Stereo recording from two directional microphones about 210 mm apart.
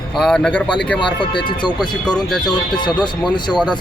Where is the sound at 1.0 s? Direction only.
20° left (ahead or behind).